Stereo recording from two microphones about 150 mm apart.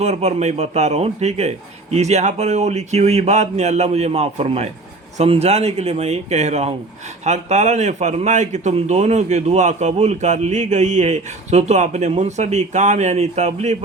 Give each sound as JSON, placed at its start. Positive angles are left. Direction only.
{"t": 0.0, "sound": "a man's voice", "side_deg": -45}